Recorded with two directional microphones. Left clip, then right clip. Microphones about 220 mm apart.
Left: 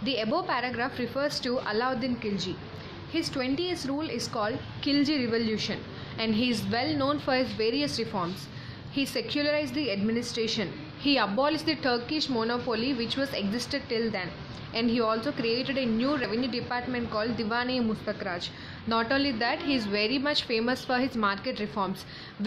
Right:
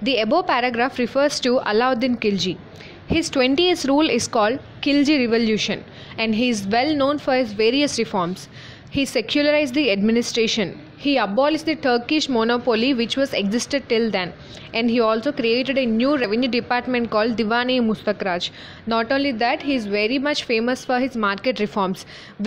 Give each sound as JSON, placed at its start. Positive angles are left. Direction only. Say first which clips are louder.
{"t": 0.0, "sound": "a woman's voice", "louder": "right 10 dB", "side_deg": -30}